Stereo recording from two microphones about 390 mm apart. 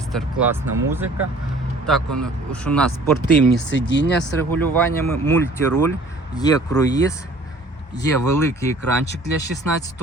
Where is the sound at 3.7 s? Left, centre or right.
Left.